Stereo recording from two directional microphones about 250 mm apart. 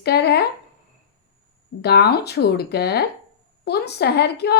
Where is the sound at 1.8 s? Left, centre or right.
Left.